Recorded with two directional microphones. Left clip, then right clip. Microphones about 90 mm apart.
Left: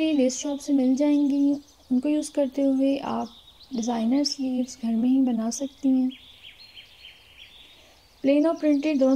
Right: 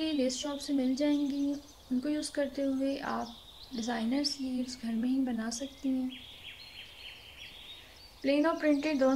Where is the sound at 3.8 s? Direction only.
30° left (ahead or behind).